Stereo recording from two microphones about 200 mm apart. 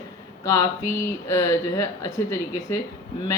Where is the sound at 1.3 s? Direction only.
15° left (ahead or behind).